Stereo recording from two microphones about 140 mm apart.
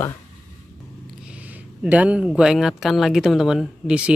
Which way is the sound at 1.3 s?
10° right (ahead or behind).